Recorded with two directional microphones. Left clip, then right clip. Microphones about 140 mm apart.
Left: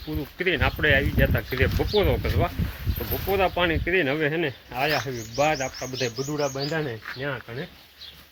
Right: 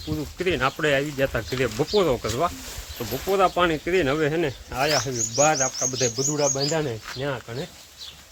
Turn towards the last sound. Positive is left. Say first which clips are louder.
# right 2 dB
turn(degrees=-35)  # may be behind; listen again after turning